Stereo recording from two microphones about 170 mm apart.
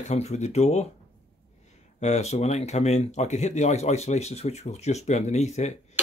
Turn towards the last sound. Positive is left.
turn(degrees=45)  # may be behind; listen again after turning